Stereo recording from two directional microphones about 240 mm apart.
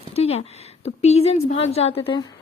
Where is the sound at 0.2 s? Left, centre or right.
Left.